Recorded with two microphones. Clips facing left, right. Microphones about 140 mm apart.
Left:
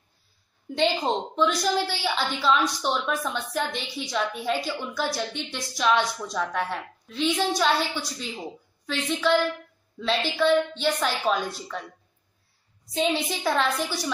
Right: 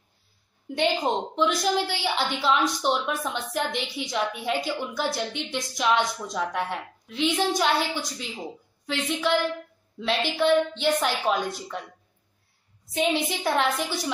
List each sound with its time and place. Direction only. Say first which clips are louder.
0.7 s a woman's voice: even; 15° right (ahead or behind)
12.9 s a woman's voice: even; 15° right (ahead or behind)